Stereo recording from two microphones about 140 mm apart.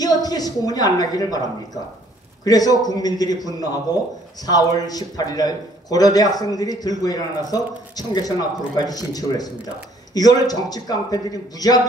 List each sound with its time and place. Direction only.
0.0 s a man's voice: 25° left (ahead or behind)